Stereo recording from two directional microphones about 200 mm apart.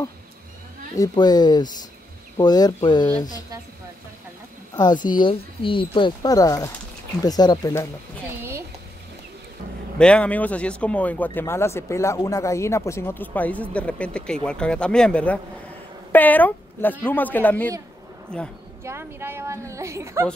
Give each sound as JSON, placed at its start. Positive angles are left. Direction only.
{"t": 0.9, "sound": "speech", "side_deg": 20}
{"t": 4.7, "sound": "speech", "side_deg": 20}
{"t": 8.4, "sound": "a sound", "side_deg": -15}
{"t": 9.9, "sound": "a woman's voice", "side_deg": 5}
{"t": 18.9, "sound": "a woman's voice", "side_deg": -10}